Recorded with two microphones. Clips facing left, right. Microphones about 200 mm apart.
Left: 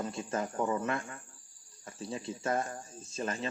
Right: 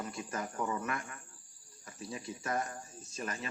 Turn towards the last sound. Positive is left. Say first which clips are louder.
# left 5 dB
turn(degrees=25)  # may be behind; listen again after turning